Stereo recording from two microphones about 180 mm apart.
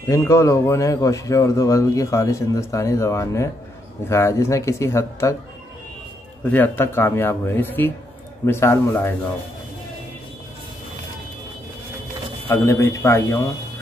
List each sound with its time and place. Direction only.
0.1 s speech: 15° left (ahead or behind)
6.5 s speech: 10° left (ahead or behind)
12.4 s speech: 15° left (ahead or behind)